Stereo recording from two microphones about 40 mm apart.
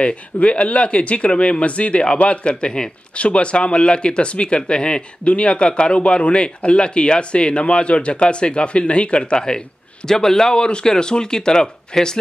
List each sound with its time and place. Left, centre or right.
0.0 s speech: left